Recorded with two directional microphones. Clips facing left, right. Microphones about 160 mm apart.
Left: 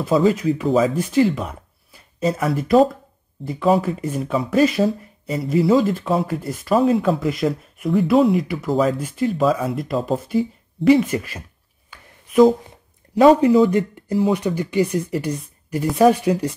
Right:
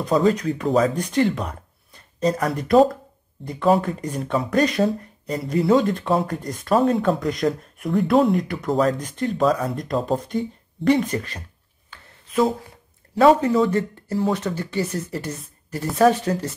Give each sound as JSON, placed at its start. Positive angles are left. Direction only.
{"t": 0.0, "sound": "speech", "side_deg": 5}
{"t": 11.9, "sound": "a sound", "side_deg": 15}
{"t": 13.4, "sound": "speech", "side_deg": 10}